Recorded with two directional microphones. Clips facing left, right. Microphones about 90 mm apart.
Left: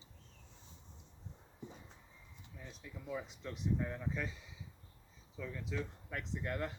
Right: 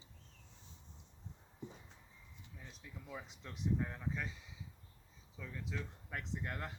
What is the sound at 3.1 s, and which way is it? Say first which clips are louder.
Speech: left 7 dB; 5° right (ahead or behind).